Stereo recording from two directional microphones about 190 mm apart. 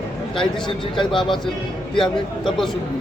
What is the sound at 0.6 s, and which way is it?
Speech, 25° left (ahead or behind).